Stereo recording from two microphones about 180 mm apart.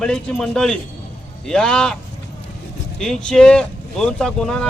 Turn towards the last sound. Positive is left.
turn(degrees=5)  # may be behind; listen again after turning